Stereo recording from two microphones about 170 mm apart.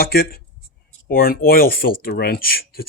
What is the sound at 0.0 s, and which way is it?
Speech, 60° left (ahead or behind).